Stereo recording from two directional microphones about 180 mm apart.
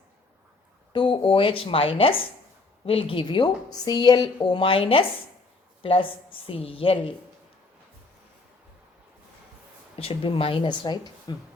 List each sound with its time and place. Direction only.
0.9 s a woman's voice: 30° left (ahead or behind)
9.9 s a woman's voice: 30° left (ahead or behind)